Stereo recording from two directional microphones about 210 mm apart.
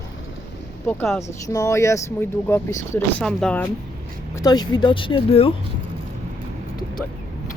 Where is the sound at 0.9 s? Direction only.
5° left (ahead or behind).